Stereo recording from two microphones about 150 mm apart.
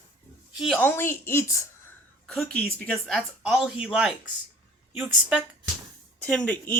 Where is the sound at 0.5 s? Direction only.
Centre (ahead or behind).